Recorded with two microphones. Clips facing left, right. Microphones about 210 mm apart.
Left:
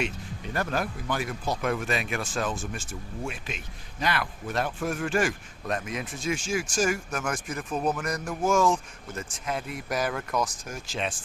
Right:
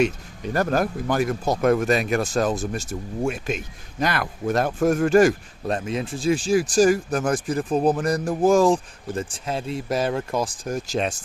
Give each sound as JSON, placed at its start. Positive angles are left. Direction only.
{"t": 0.5, "sound": "speech", "side_deg": -40}